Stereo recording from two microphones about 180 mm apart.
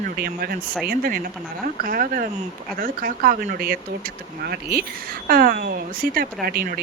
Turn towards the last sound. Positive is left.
turn(degrees=-55)  # may be behind; listen again after turning